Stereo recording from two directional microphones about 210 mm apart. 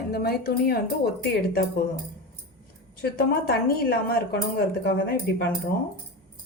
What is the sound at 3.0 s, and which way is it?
A woman's voice, 50° left (ahead or behind).